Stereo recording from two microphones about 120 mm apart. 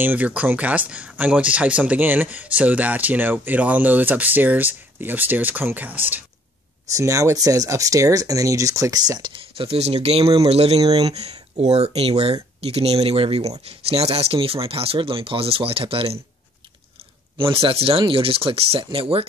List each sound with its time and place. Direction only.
0.0 s speech: 15° right (ahead or behind)
6.9 s speech: 25° right (ahead or behind); by 10.9 s 55° right (ahead or behind)
10.9 s speech: 35° right (ahead or behind)
11.6 s speech: 60° right (ahead or behind)
17.4 s speech: 50° right (ahead or behind)